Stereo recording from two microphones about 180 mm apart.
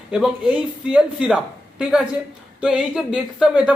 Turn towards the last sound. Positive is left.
turn(degrees=-5)  # may be behind; listen again after turning